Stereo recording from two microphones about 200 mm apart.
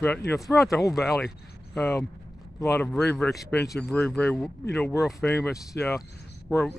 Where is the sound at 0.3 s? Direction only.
5° left (ahead or behind).